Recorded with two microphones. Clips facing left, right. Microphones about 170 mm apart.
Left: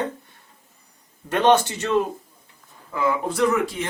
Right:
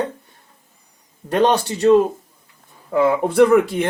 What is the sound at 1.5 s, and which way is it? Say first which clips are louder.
Speech: right 4 dB; 35° right (ahead or behind).